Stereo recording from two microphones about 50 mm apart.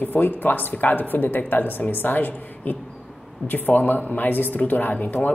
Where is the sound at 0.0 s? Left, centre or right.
Left.